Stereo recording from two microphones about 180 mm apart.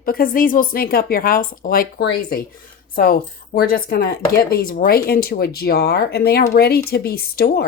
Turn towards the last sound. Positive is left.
turn(degrees=55)  # may be behind; listen again after turning